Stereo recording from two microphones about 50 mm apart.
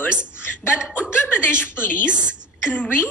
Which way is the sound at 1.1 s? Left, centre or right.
Left.